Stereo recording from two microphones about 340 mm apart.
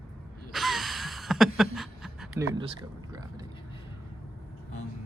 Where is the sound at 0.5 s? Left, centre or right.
Centre.